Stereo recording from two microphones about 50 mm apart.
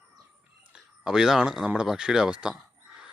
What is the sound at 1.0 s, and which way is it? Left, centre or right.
Speech, centre.